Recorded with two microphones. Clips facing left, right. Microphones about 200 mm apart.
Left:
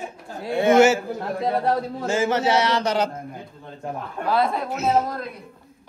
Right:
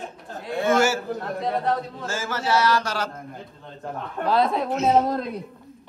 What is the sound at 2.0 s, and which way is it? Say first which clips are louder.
A man's voice: left 7 dB; 15° left (ahead or behind).